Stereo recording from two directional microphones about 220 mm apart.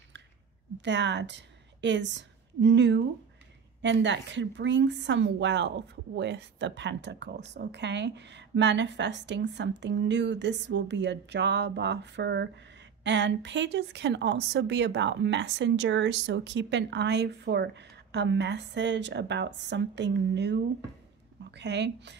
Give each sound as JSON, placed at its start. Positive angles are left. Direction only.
{"t": 0.7, "sound": "a woman's voice", "side_deg": -55}